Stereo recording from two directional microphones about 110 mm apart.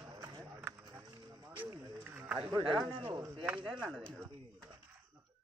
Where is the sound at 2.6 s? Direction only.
50° right (ahead or behind).